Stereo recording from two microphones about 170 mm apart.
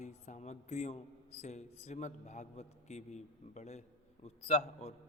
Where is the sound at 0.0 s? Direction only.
40° left (ahead or behind).